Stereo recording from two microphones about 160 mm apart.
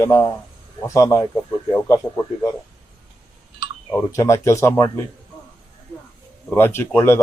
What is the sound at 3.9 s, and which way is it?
Speech, 20° left (ahead or behind).